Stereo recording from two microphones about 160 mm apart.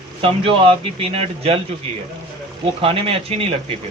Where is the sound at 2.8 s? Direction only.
35° right (ahead or behind).